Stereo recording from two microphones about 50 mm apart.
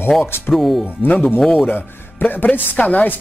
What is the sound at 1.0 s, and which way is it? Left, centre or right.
Speech, left.